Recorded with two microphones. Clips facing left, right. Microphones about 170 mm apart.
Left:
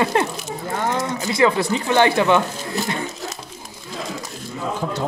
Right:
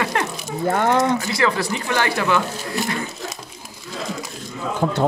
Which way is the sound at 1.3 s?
25° left (ahead or behind).